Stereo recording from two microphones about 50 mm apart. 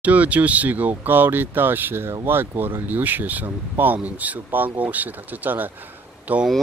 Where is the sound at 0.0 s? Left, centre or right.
Right.